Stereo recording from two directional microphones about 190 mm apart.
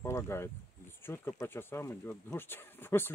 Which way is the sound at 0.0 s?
15° left (ahead or behind).